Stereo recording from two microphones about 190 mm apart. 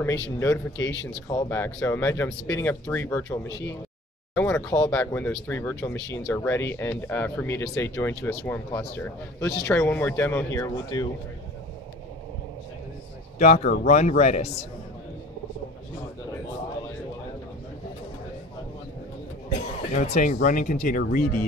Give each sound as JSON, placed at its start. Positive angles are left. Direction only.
{"t": 0.4, "sound": "speech", "side_deg": 15}
{"t": 4.4, "sound": "speech", "side_deg": 10}
{"t": 13.4, "sound": "speech", "side_deg": 35}
{"t": 19.9, "sound": "speech", "side_deg": 40}